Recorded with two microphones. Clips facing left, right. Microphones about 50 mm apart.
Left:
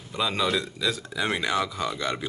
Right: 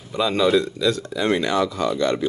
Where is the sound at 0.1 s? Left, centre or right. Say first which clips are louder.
Right 7 dB; centre.